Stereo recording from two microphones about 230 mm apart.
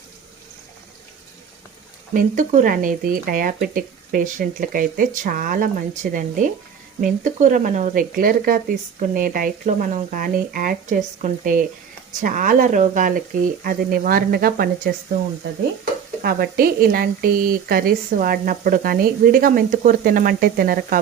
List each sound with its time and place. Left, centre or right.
2.1 s stir: right
15.8 s stir: right